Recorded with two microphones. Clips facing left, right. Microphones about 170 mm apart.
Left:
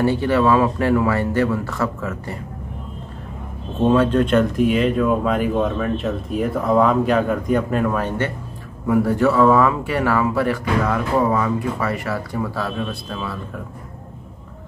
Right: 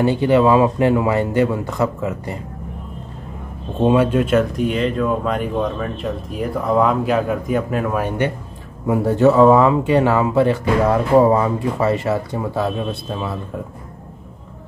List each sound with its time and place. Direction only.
0.0 s speech: 20° right (ahead or behind)
3.8 s speech: 10° right (ahead or behind)
8.8 s speech: 20° right (ahead or behind)